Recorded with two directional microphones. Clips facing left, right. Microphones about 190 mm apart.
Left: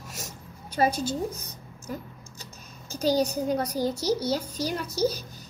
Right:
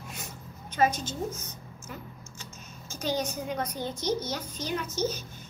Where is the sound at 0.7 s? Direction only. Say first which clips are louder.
Left 1 dB; 35° left (ahead or behind).